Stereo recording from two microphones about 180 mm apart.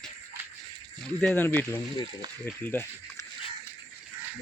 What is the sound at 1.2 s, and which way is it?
Speech, 10° left (ahead or behind).